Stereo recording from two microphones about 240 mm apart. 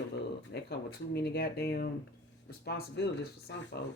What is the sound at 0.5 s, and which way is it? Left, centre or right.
Speech, left.